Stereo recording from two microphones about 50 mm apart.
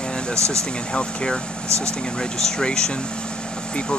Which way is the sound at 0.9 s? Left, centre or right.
Centre.